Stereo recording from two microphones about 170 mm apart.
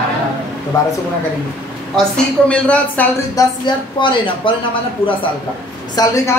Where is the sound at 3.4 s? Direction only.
20° left (ahead or behind).